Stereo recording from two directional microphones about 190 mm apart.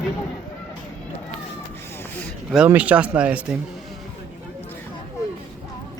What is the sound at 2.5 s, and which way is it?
Speech, 5° right (ahead or behind).